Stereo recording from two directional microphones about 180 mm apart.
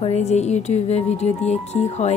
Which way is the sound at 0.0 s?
40° left (ahead or behind).